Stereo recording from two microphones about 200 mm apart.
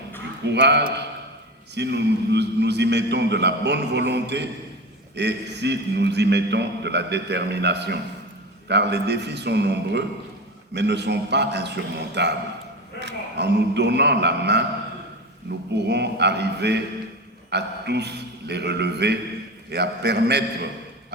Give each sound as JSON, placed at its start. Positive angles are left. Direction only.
{"t": 0.4, "sound": "a man's voice", "side_deg": -60}
{"t": 15.7, "sound": "a man's voice", "side_deg": -60}